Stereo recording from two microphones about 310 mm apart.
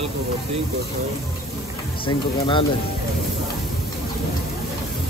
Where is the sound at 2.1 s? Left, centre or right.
Centre.